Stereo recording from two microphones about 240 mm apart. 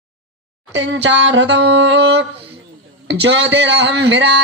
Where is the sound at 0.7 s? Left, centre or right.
Right.